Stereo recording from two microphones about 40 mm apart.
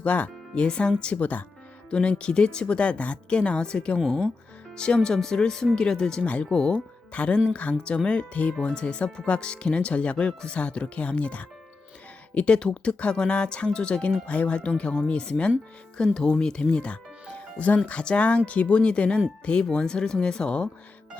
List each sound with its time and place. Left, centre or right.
0.0 s speech: left
1.1 s speech: left
1.9 s speech: left
3.9 s speech: centre
4.8 s speech: left
6.2 s speech: left
6.5 s speech: centre
7.1 s speech: left
16.0 s speech: centre